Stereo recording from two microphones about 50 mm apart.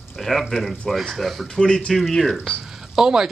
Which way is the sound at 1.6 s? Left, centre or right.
Centre.